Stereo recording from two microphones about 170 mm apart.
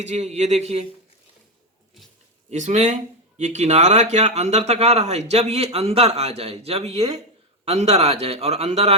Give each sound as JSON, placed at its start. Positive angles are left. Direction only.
{"t": 0.0, "sound": "speech", "side_deg": -40}
{"t": 2.5, "sound": "speech", "side_deg": -45}